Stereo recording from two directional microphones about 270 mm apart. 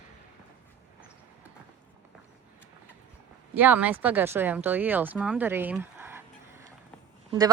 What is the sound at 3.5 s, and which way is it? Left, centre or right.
Speech, centre.